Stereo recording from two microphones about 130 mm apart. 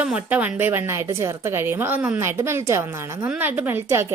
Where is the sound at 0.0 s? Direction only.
10° right (ahead or behind).